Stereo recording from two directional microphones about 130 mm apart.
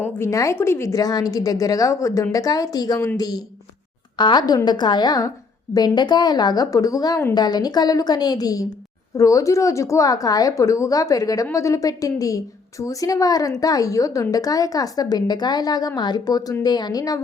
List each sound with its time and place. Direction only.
0.0 s a woman's voice: 20° left (ahead or behind)